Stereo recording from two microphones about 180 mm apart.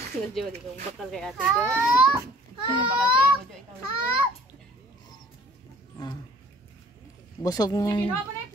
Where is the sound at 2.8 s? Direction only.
25° right (ahead or behind).